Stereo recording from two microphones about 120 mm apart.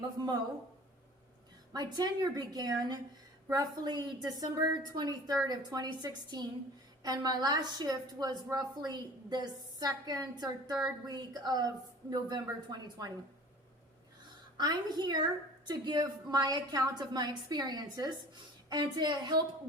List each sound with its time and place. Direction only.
0.2 s a woman's voice: 35° right (ahead or behind)
1.7 s a woman's voice: 35° right (ahead or behind)
14.6 s a woman's voice: 35° right (ahead or behind)